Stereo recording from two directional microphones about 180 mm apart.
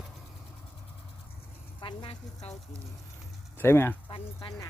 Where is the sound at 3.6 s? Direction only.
10° left (ahead or behind).